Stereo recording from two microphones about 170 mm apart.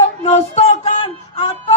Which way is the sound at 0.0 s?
40° left (ahead or behind).